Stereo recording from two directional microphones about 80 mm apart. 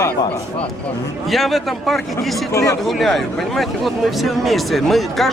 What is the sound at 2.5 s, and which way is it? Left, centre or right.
Speech, left.